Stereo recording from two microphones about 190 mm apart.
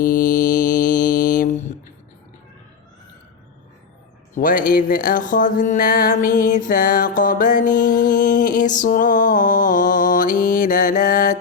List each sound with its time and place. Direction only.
0.0 s mantra: 45° left (ahead or behind)
4.4 s music: 45° left (ahead or behind)